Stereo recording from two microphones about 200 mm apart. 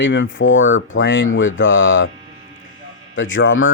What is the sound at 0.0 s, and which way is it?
Speech, 65° left (ahead or behind).